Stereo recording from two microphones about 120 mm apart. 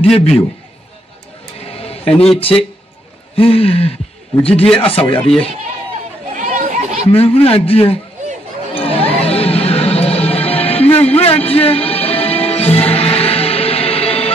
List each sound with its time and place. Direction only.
0.0 s a man's voice: 55° left (ahead or behind)
1.6 s a sound: 55° left (ahead or behind)
3.3 s a man's voice: 50° left (ahead or behind)
6.3 s chatter: 90° right
7.1 s a man's voice: 55° left (ahead or behind)
8.7 s music: 55° left (ahead or behind)